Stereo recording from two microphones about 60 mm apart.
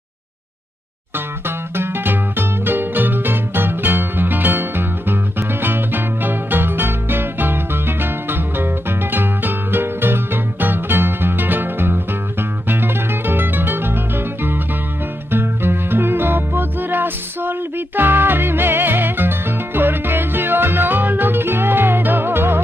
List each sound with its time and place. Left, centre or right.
1.8 s music: right